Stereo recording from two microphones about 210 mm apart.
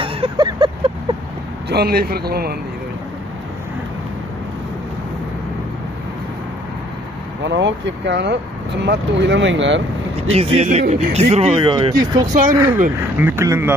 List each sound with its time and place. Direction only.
0.0 s vehicle: 20° right (ahead or behind)
1.7 s speech: 45° right (ahead or behind)
7.4 s speech: 60° right (ahead or behind)
10.3 s speech: 30° right (ahead or behind)
12.2 s speech: 40° right (ahead or behind)
12.5 s speech: 10° right (ahead or behind)